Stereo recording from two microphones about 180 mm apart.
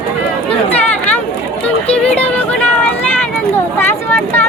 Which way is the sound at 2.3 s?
10° left (ahead or behind).